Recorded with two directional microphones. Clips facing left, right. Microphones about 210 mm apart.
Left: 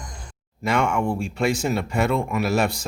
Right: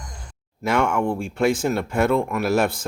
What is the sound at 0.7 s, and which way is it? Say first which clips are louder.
Speech: right 1 dB; 5° right (ahead or behind).